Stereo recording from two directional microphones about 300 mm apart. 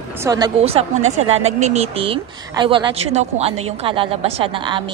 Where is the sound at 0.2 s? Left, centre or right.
Centre.